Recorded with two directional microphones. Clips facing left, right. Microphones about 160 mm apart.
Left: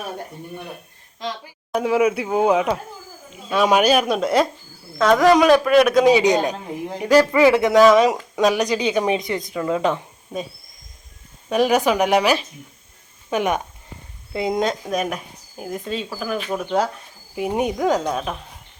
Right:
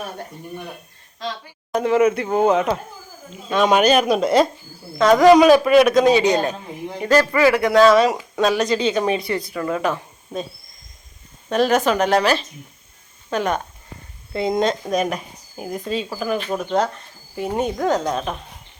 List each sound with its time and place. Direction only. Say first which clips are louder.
1.7 s speech: right 2 dB; 5° left (ahead or behind)
11.4 s speech: even; 10° left (ahead or behind)